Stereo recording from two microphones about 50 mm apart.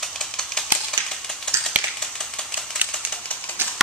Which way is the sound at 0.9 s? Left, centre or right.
Centre.